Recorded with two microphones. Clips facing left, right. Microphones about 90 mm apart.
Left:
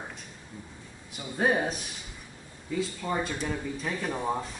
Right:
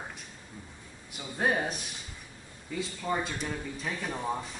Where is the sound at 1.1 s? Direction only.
5° left (ahead or behind).